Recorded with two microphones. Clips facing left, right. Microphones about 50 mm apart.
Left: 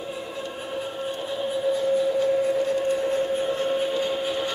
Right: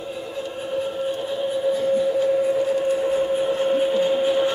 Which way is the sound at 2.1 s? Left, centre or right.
Centre.